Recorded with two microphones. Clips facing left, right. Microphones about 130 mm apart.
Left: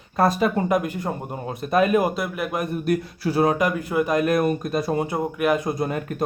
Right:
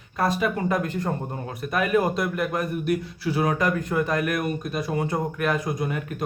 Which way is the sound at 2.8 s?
40° left (ahead or behind).